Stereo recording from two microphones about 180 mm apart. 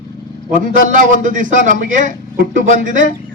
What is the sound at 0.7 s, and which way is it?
A man's voice, 45° right (ahead or behind).